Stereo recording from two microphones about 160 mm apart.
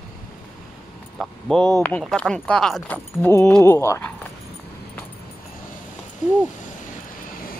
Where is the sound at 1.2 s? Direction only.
Centre (ahead or behind).